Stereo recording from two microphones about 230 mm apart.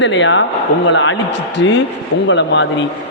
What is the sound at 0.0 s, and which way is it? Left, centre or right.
A man's voice, left.